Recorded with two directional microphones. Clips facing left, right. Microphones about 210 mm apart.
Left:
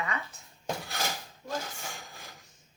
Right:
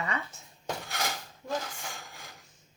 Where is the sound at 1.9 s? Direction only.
Centre (ahead or behind).